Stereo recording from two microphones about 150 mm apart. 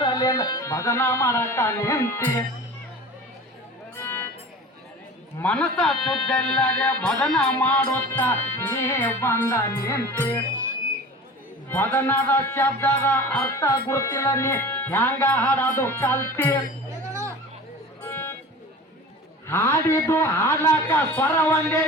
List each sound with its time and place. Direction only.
0.0 s music: 25° left (ahead or behind)
4.0 s music: 15° left (ahead or behind)
5.4 s music: 5° left (ahead or behind)
11.7 s music: 15° left (ahead or behind)
18.0 s music: 15° left (ahead or behind)
19.5 s music: 15° left (ahead or behind)